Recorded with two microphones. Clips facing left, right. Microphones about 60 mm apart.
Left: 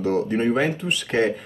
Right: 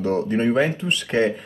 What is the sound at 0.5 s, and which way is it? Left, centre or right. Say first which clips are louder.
Speech: right 2 dB; right.